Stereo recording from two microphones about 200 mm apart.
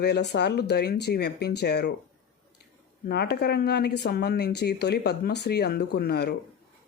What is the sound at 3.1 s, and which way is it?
Speech, 55° left (ahead or behind).